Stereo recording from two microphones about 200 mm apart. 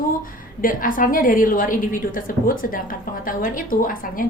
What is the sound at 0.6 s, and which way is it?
A woman's voice, 45° left (ahead or behind).